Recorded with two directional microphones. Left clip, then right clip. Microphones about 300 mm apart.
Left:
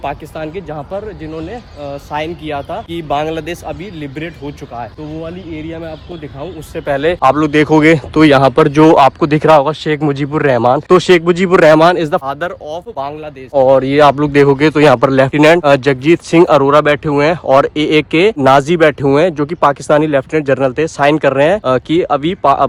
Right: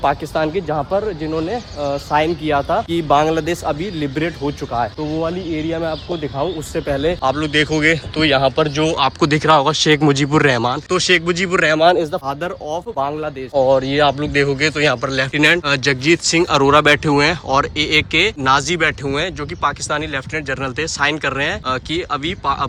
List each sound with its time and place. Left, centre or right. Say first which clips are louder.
0.0 s speech: right 4 dB; centre
6.9 s speech: left 8 dB; left
9.0 s speech: left 7 dB; centre
12.3 s speech: left 3 dB; centre
13.5 s speech: left 5 dB; left
13.8 s speech: left 7 dB; centre